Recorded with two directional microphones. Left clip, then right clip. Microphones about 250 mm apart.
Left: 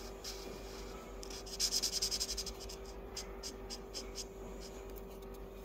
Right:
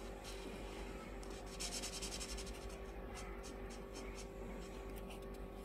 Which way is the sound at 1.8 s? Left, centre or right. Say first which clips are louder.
Left 10 dB; centre.